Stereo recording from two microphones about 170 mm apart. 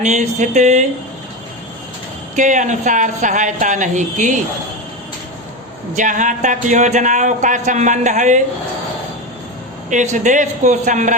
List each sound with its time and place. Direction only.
0.0 s speech: 45° right (ahead or behind)
2.3 s speech: 45° right (ahead or behind)
5.9 s speech: 45° right (ahead or behind)
9.9 s speech: 45° right (ahead or behind)